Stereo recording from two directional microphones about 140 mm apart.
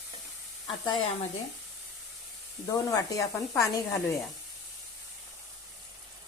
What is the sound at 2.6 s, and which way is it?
Speech, 25° left (ahead or behind).